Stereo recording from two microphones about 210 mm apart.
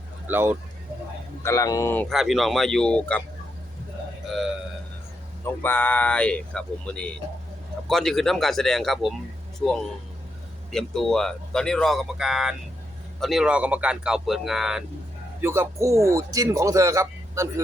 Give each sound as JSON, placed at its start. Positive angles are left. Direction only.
{"t": 0.3, "sound": "a man's voice", "side_deg": -10}
{"t": 1.5, "sound": "speech", "side_deg": 15}
{"t": 5.6, "sound": "a man's voice", "side_deg": 10}